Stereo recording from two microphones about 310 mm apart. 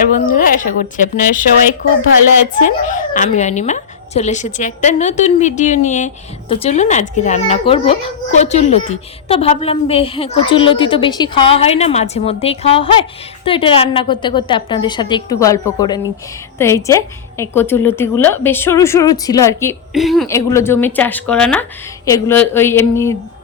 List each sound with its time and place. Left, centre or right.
0.0 s a woman's voice: left
2.6 s a woman's voice: left; by 23.1 s centre